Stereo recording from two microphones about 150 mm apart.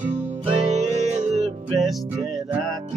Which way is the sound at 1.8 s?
Centre (ahead or behind).